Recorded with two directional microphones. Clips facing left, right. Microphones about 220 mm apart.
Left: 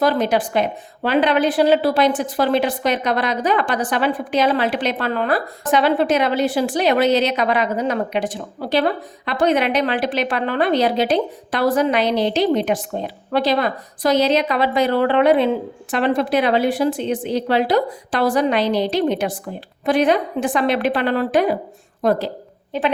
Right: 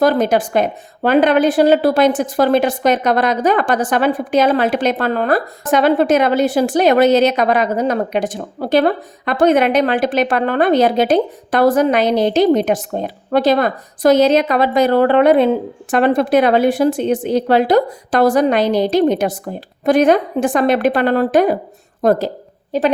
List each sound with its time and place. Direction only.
0.0 s a woman's voice: 45° right (ahead or behind)